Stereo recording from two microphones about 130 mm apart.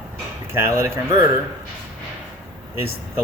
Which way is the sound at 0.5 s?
20° right (ahead or behind).